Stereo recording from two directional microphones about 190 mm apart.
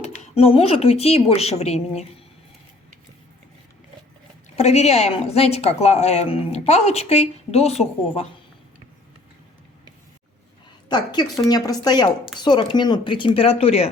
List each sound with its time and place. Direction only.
0.0 s a woman's voice: 35° left (ahead or behind)
4.5 s a woman's voice: 35° left (ahead or behind)
10.8 s a woman's voice: 25° left (ahead or behind)